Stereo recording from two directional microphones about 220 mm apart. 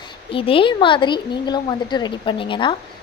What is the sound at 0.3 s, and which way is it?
A woman's voice, 25° left (ahead or behind).